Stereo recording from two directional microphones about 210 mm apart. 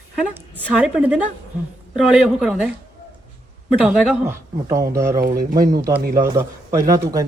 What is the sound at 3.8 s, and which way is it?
Speech, 10° right (ahead or behind).